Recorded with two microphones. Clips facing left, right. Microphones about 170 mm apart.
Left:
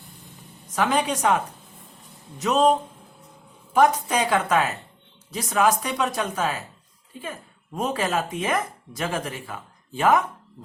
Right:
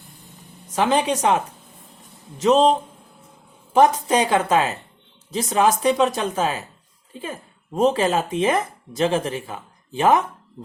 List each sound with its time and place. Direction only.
0.8 s speech: 25° right (ahead or behind)
2.4 s speech: 25° right (ahead or behind)